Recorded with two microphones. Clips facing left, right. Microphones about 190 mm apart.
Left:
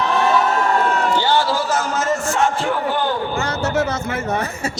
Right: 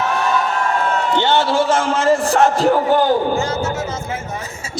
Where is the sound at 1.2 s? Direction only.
25° right (ahead or behind).